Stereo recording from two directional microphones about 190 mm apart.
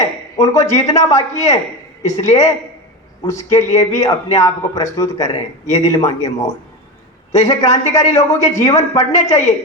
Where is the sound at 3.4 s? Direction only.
15° left (ahead or behind).